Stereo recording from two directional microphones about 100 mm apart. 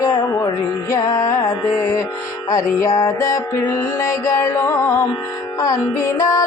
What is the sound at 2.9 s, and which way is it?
Music, 30° left (ahead or behind).